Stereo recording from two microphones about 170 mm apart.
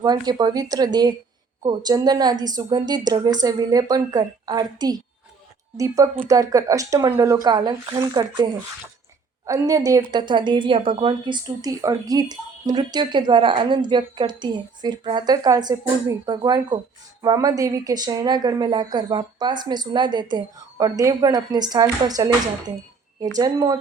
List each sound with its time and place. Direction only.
0.0 s a woman's voice: 25° right (ahead or behind)
9.5 s a woman's voice: 20° right (ahead or behind)